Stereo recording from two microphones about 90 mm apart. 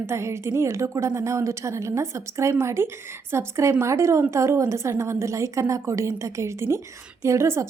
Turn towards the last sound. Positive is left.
turn(degrees=-30)  # may be behind; listen again after turning